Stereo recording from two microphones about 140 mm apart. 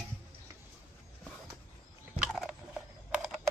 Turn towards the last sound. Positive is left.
turn(degrees=-5)  # may be behind; listen again after turning